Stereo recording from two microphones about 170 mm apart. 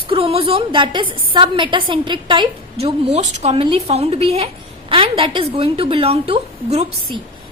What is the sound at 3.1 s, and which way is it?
Speech, 40° right (ahead or behind).